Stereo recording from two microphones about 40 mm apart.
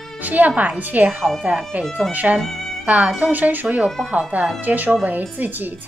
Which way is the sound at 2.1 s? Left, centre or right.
Right.